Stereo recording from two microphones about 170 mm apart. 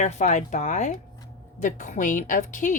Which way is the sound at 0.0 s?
45° left (ahead or behind).